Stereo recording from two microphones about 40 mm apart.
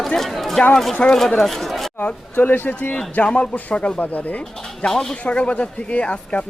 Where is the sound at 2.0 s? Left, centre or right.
Left.